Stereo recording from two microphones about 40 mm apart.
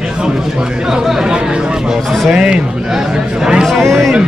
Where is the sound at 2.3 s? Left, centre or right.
Centre.